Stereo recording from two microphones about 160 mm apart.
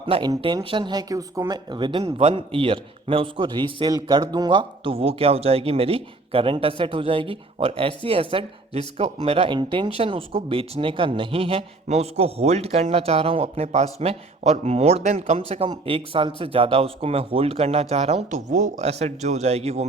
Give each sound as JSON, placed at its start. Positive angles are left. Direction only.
{"t": 0.0, "sound": "speech", "side_deg": -30}